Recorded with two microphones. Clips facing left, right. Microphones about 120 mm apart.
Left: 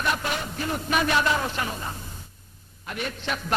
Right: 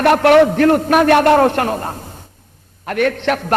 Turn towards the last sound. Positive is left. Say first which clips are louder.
# right 13 dB
turn(degrees=-65)  # may be behind; listen again after turning